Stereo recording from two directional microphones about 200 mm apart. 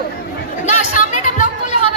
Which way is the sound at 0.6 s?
40° left (ahead or behind).